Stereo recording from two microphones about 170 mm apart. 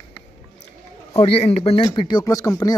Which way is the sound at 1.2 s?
35° left (ahead or behind).